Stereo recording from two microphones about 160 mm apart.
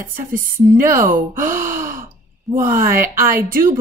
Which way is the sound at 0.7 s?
15° right (ahead or behind).